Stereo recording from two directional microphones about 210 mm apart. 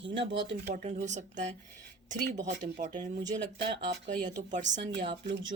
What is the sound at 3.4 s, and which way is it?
Speech, 55° right (ahead or behind).